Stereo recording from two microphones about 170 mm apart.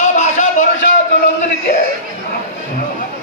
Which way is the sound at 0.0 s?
45° left (ahead or behind).